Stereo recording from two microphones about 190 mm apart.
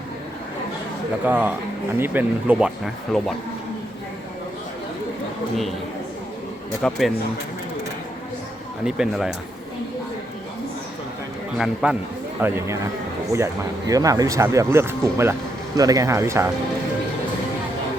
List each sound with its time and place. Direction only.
1.2 s speech: 10° right (ahead or behind)
6.8 s speech: 5° left (ahead or behind)
8.8 s speech: centre (ahead or behind)
11.5 s speech: 5° right (ahead or behind)
12.4 s speech: 15° right (ahead or behind)